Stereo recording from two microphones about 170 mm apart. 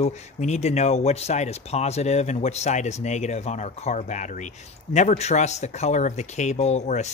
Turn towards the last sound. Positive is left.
turn(degrees=40)  # may be behind; listen again after turning